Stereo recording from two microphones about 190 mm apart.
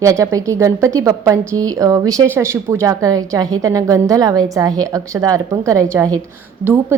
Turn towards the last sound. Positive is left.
turn(degrees=-10)  # may be behind; listen again after turning